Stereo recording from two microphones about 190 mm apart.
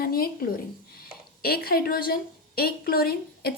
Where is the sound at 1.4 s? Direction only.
55° left (ahead or behind).